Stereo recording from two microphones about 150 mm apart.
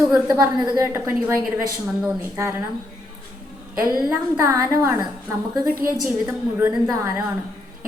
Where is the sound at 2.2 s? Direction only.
20° right (ahead or behind).